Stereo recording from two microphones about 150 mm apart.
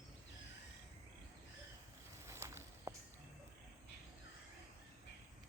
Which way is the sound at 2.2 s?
20° right (ahead or behind).